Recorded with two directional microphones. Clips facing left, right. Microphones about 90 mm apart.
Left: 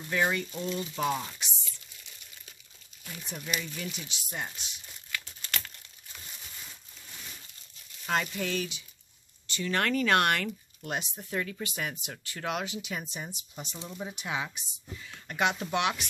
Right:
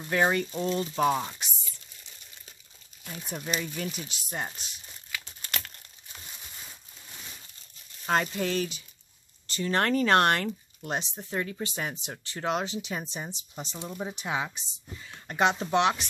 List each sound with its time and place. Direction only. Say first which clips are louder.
0.1 s speech: right 4 dB; 45° right (ahead or behind)
3.0 s crumpling: right 3 dB; 30° right (ahead or behind)
3.3 s speech: right 3 dB; 35° right (ahead or behind)
8.1 s speech: right 3 dB; 35° right (ahead or behind)